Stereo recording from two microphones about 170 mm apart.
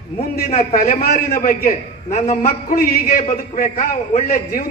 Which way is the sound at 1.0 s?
60° left (ahead or behind).